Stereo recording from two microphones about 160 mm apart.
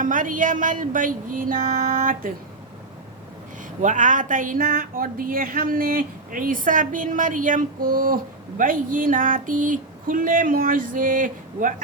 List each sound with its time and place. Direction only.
0.0 s speech: 55° right (ahead or behind)
3.8 s speech: 50° right (ahead or behind)